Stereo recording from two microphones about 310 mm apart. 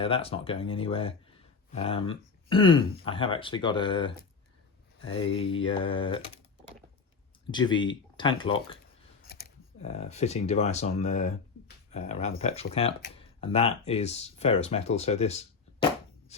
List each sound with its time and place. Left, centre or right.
0.0 s speech: centre
5.1 s speech: centre
7.5 s speech: centre
9.8 s speech: left